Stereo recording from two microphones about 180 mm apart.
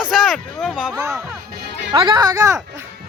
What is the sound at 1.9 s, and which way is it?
Speech, 25° right (ahead or behind).